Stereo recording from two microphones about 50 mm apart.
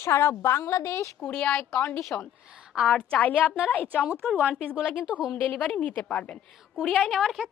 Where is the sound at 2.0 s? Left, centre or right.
Centre.